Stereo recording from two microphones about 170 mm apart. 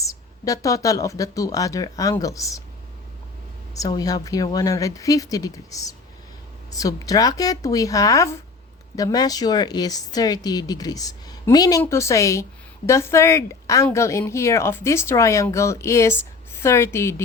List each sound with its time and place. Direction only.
0.0 s a woman's voice: 20° left (ahead or behind)
3.8 s a woman's voice: 20° left (ahead or behind)